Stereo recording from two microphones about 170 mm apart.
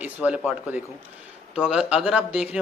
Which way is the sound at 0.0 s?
10° right (ahead or behind).